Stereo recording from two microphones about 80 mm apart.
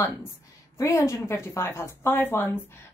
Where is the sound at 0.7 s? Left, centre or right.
Left.